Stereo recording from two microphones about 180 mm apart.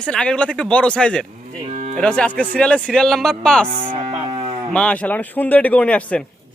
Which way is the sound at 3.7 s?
30° right (ahead or behind).